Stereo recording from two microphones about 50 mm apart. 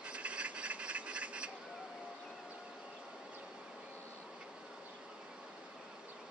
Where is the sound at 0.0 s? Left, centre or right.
Right.